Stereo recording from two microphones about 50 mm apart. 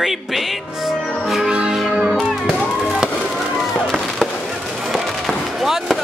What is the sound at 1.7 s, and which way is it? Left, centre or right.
Music, centre.